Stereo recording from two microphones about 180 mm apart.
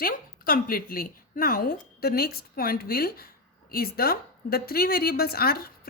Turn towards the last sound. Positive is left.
turn(degrees=55)  # may be behind; listen again after turning